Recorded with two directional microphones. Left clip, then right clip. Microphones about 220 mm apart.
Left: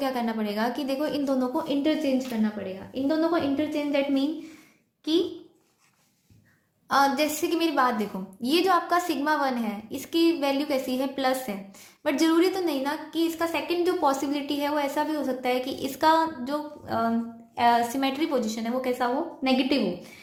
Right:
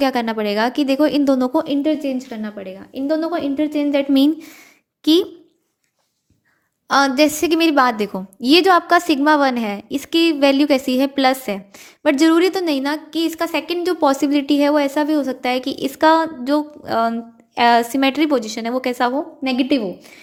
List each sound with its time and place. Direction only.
0.0 s a woman's voice: 40° right (ahead or behind)
6.8 s a woman's voice: 40° right (ahead or behind)